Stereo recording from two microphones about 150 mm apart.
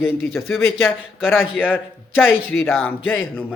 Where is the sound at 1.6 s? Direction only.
10° left (ahead or behind).